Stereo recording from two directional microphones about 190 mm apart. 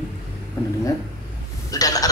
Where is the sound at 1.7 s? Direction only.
20° left (ahead or behind).